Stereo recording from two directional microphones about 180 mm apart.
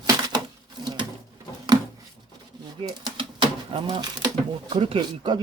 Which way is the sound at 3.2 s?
30° right (ahead or behind).